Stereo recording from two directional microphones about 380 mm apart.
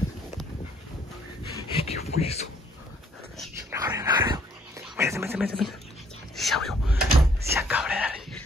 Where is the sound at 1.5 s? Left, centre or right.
Centre.